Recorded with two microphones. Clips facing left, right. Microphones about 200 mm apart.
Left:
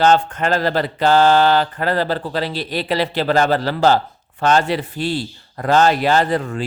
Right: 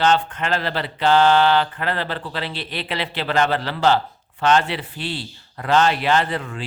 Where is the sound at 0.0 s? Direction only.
45° left (ahead or behind).